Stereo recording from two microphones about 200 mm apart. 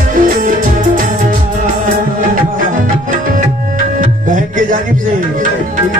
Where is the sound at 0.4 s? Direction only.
40° right (ahead or behind).